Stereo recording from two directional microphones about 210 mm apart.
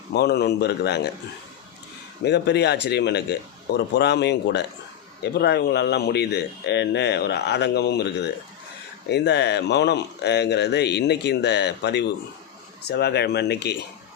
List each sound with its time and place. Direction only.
0.1 s speech: 50° left (ahead or behind)
2.2 s speech: 55° left (ahead or behind)